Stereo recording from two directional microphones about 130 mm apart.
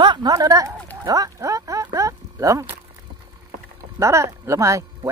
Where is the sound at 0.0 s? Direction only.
35° right (ahead or behind).